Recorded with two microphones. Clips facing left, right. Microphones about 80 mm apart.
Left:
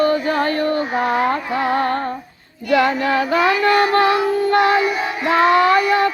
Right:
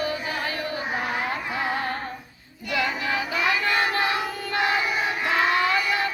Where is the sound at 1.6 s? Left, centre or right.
Left.